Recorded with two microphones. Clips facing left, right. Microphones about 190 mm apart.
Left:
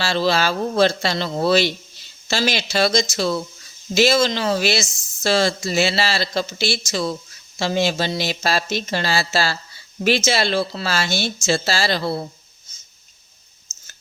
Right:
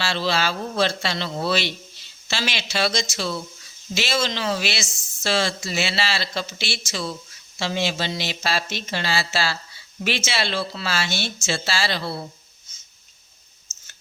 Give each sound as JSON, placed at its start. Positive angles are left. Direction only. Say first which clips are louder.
{"t": 0.0, "sound": "speech", "louder": "left 4 dB", "side_deg": 40}
{"t": 13.7, "sound": "clicking", "louder": "left 2 dB", "side_deg": 20}